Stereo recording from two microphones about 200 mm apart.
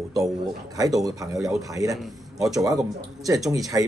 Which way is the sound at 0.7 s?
15° right (ahead or behind).